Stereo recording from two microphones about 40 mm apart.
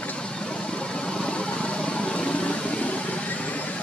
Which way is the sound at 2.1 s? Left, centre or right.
Left.